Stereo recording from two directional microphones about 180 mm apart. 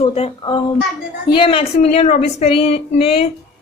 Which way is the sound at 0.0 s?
35° left (ahead or behind).